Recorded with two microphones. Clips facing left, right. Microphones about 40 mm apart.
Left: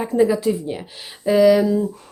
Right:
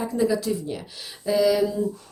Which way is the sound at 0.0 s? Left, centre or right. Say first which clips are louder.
Left 6 dB; left.